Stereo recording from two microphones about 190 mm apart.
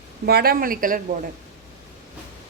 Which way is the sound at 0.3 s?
55° right (ahead or behind).